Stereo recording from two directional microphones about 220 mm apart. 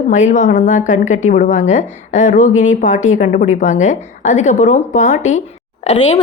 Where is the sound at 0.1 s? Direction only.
35° left (ahead or behind).